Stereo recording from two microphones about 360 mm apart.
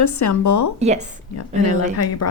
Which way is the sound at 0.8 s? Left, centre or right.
Centre.